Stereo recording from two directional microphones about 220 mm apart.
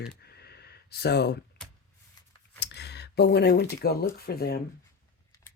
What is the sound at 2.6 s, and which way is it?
Speech, 50° left (ahead or behind).